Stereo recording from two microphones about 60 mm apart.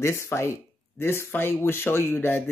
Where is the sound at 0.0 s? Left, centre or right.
Left.